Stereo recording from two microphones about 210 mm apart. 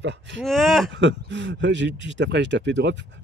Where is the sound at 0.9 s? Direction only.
60° right (ahead or behind).